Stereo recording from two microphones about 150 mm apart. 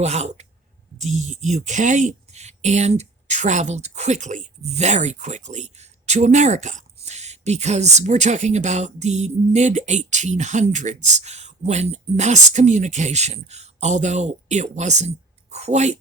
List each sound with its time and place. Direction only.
0.0 s a woman's voice: 45° right (ahead or behind)